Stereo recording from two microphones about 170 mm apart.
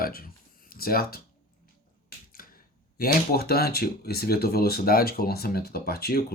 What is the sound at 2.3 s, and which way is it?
Speech, 60° left (ahead or behind).